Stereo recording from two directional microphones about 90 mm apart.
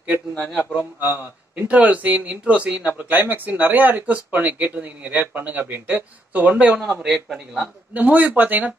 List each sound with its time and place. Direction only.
0.3 s a man's voice: 20° left (ahead or behind)
1.0 s a man's voice: 20° right (ahead or behind)